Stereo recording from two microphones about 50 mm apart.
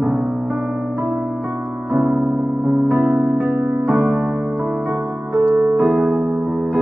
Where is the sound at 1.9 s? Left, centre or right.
Right.